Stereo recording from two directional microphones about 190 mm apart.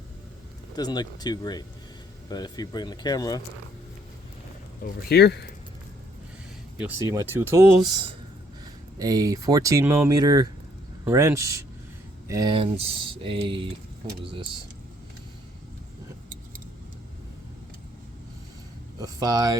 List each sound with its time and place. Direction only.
0.8 s speech: 20° left (ahead or behind)
4.8 s speech: 60° left (ahead or behind)
7.0 s speech: 15° right (ahead or behind)
18.9 s a sound: 20° right (ahead or behind)